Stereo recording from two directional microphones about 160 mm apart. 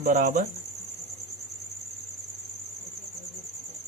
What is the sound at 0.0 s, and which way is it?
Cricket, 55° right (ahead or behind).